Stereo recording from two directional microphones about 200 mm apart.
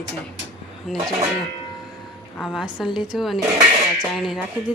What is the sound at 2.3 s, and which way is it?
A woman's voice, centre (ahead or behind).